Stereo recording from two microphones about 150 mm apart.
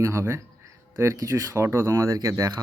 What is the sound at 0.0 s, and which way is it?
A man's voice, 20° right (ahead or behind).